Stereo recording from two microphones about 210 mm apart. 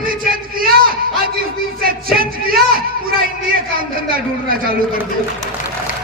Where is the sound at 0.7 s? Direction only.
45° right (ahead or behind).